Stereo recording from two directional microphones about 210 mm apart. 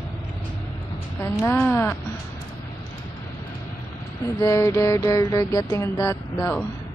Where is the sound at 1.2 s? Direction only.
15° left (ahead or behind).